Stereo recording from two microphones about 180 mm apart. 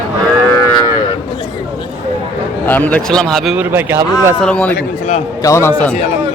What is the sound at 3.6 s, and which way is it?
Speech, 10° right (ahead or behind).